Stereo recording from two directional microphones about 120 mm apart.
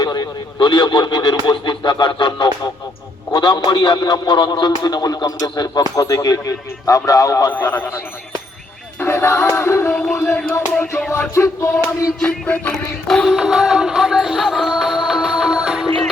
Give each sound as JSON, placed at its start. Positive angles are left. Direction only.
{"t": 0.0, "sound": "a man's voice", "side_deg": 35}
{"t": 7.5, "sound": "a sound", "side_deg": 20}
{"t": 12.2, "sound": "music", "side_deg": 10}